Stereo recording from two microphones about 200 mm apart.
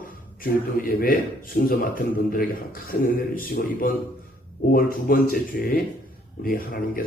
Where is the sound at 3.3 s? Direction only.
45° left (ahead or behind).